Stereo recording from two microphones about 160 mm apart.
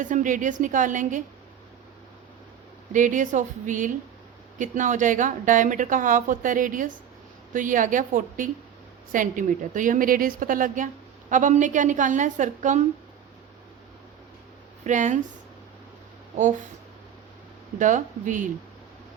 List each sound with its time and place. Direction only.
0.0 s speech: 55° right (ahead or behind)
2.9 s a woman's voice: 55° right (ahead or behind)
14.8 s speech: 50° right (ahead or behind)
16.3 s speech: 50° right (ahead or behind)
17.7 s speech: 50° right (ahead or behind)